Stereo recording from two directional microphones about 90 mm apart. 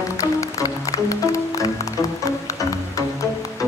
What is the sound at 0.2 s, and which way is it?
Music, 40° left (ahead or behind).